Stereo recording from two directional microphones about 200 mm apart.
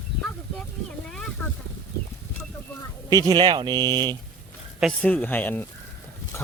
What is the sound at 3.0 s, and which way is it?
Speech, 20° right (ahead or behind).